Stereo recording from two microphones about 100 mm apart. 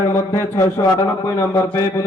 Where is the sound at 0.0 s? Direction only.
30° left (ahead or behind).